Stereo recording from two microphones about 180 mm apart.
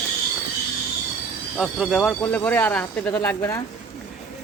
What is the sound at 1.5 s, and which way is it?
Speech, centre (ahead or behind).